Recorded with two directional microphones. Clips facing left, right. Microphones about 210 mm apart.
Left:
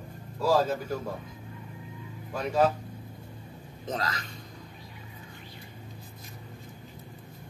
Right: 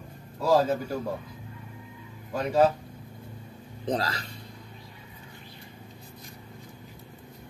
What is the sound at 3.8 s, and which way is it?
Speech, 35° right (ahead or behind).